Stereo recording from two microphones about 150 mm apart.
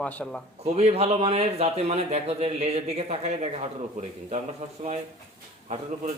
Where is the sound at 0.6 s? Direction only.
45° right (ahead or behind).